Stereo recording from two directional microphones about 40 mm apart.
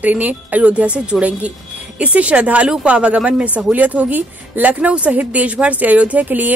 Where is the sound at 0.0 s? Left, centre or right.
Right.